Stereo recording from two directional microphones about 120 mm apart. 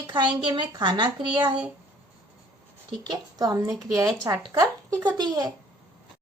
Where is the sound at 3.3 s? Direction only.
30° right (ahead or behind).